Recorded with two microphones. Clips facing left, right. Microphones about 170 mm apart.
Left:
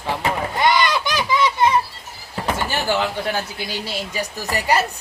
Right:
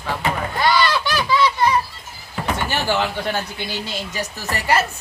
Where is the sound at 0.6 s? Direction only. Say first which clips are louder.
Even; 20° left (ahead or behind).